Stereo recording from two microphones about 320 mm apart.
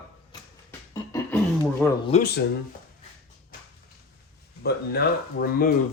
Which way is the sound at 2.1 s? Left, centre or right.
Left.